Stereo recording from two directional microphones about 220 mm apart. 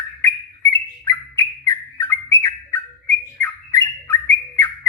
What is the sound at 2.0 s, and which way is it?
Bird, 10° left (ahead or behind).